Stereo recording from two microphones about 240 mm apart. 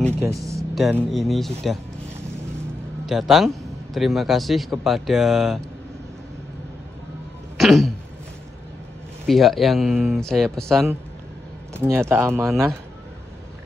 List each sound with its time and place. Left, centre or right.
0.3 s a man's voice: centre
3.1 s a man's voice: centre
7.5 s throat clearing: centre
9.3 s a man's voice: centre
11.7 s speech: centre